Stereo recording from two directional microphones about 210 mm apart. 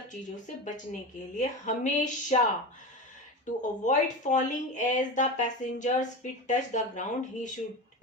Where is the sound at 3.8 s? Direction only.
35° left (ahead or behind).